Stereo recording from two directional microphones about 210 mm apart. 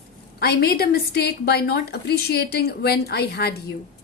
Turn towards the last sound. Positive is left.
turn(degrees=50)  # may be behind; listen again after turning